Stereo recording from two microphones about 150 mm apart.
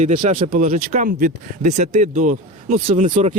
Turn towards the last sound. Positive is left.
turn(degrees=-55)  # may be behind; listen again after turning